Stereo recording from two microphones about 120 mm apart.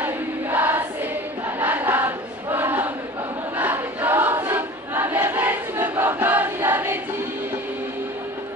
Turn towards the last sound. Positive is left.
turn(degrees=-15)  # may be behind; listen again after turning